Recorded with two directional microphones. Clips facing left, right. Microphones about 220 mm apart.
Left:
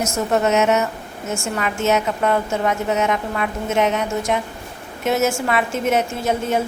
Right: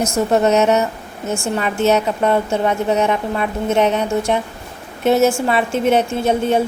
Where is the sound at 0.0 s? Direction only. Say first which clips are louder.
Right 4 dB; 35° right (ahead or behind).